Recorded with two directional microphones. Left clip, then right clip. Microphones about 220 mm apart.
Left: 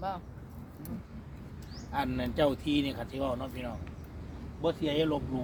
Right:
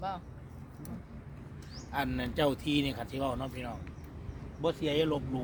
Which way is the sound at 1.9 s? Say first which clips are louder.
Left 1 dB; 45° right (ahead or behind).